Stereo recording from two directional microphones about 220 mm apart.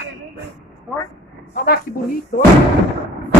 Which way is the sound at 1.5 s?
40° left (ahead or behind).